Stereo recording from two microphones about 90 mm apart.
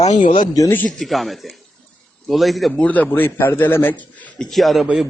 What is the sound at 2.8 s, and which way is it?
Speech, 15° left (ahead or behind).